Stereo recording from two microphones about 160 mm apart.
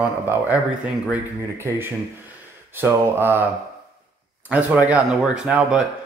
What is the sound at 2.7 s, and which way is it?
Speech, 15° right (ahead or behind).